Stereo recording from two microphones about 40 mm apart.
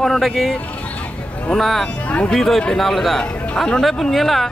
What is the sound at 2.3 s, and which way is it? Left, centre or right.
Speech, centre.